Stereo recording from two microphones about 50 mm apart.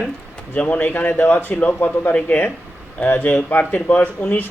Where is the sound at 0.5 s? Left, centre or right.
Left.